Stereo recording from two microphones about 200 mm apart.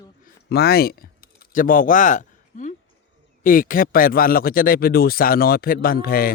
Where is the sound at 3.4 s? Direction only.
45° left (ahead or behind).